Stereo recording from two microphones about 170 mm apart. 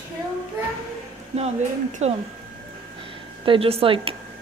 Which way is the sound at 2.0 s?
40° right (ahead or behind).